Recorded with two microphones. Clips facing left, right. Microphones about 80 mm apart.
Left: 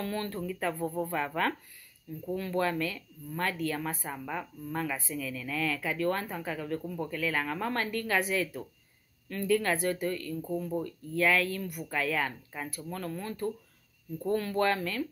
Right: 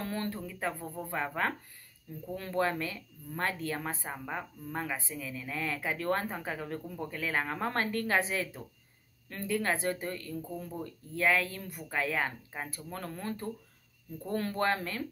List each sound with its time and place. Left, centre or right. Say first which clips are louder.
0.0 s speech: left 2 dB; right
2.3 s speech: left 1 dB; right